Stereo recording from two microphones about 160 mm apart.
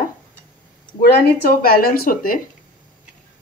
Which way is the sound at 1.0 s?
70° left (ahead or behind).